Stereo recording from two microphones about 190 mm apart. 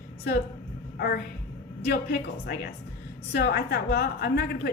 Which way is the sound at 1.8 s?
55° left (ahead or behind).